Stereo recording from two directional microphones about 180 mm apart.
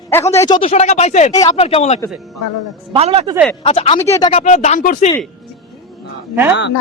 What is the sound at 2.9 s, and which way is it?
Speech, 35° right (ahead or behind).